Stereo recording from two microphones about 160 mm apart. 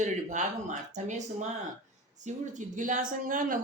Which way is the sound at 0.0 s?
50° right (ahead or behind).